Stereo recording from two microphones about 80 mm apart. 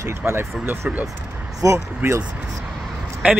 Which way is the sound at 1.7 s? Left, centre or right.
Right.